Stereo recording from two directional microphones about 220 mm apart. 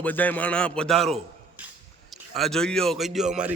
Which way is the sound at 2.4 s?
Centre (ahead or behind).